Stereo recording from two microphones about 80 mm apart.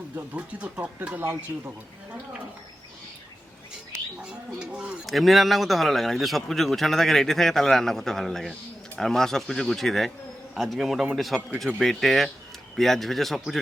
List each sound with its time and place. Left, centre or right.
0.2 s speech: centre
4.2 s speech: centre
5.0 s speech: centre